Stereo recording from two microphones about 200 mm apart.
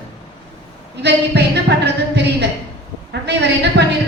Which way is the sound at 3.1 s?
55° right (ahead or behind).